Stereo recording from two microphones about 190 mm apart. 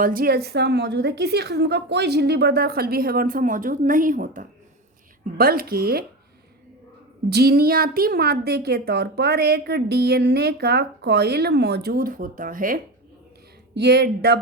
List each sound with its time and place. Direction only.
0.0 s a woman's voice: 50° right (ahead or behind)
7.3 s a woman's voice: 55° right (ahead or behind)
13.7 s a woman's voice: 60° right (ahead or behind)